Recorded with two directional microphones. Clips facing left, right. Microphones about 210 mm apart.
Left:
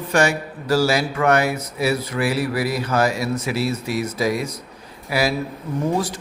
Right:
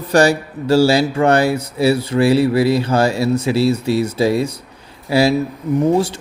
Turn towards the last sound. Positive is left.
turn(degrees=-25)  # may be behind; listen again after turning